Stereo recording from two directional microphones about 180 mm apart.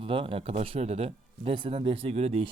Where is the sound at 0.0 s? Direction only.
30° right (ahead or behind).